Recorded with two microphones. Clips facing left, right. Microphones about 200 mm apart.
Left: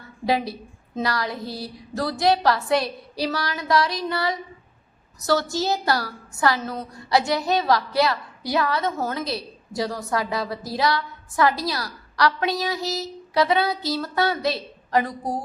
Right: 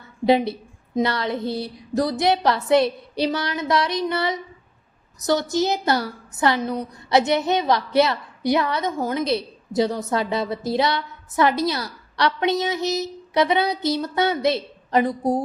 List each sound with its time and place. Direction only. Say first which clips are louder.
0.3 s a woman's voice: right 5 dB; 25° right (ahead or behind)